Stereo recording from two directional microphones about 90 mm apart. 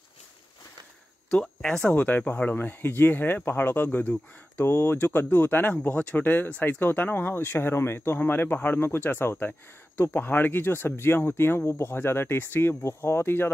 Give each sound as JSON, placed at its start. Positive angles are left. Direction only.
{"t": 1.3, "sound": "speech", "side_deg": 5}
{"t": 2.0, "sound": "speech", "side_deg": 20}